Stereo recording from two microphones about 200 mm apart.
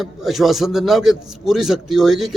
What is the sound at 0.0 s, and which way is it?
A man's voice, centre (ahead or behind).